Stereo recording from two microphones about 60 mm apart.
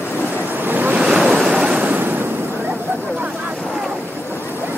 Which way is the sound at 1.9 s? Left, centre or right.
Right.